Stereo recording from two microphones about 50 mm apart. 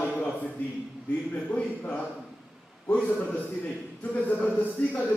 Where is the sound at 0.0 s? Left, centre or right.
Left.